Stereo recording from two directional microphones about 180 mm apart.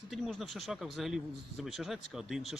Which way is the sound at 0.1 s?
Centre (ahead or behind).